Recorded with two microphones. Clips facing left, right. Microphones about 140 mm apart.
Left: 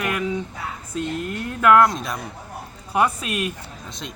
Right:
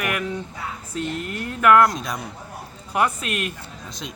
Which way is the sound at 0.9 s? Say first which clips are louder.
Left 2 dB; 80° right.